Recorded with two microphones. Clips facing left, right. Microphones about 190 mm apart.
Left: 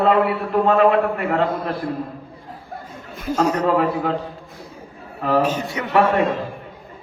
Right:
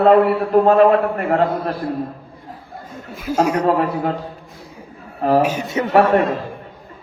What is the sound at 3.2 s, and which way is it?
Speech, 10° right (ahead or behind).